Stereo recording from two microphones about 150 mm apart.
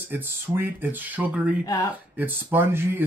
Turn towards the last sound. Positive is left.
turn(degrees=-15)  # may be behind; listen again after turning